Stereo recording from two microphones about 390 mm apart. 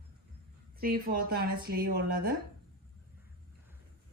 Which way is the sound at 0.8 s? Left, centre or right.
Right.